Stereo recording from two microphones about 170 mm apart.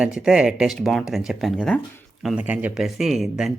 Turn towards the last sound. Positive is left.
turn(degrees=0)  # may be behind; listen again after turning